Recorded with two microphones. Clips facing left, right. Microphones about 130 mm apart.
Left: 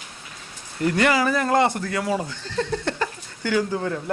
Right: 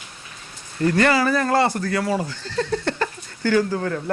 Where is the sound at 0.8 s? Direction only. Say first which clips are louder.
Right 2 dB; 15° left (ahead or behind).